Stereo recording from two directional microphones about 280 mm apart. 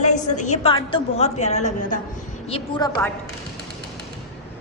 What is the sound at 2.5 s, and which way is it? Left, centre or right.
Speech, centre.